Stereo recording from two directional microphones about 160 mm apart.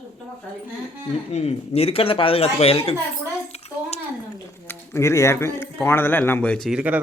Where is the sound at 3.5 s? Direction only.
40° left (ahead or behind).